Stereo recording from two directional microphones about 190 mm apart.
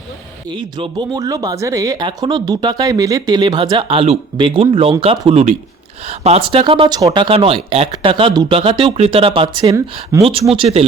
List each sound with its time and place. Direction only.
0.5 s speech: 25° right (ahead or behind)